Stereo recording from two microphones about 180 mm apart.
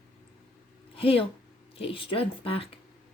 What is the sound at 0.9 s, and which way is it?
Speech, 30° left (ahead or behind).